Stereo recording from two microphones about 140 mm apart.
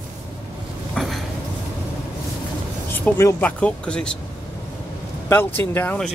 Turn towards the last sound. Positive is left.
turn(degrees=15)  # may be behind; listen again after turning